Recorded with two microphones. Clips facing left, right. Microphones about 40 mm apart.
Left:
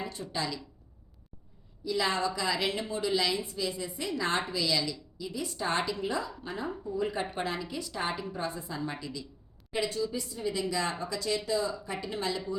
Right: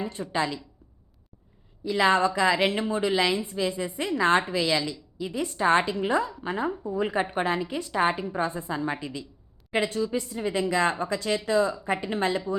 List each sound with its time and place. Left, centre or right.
0.0 s a woman's voice: right
1.8 s a woman's voice: right